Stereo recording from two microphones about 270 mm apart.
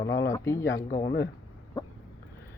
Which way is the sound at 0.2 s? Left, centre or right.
Centre.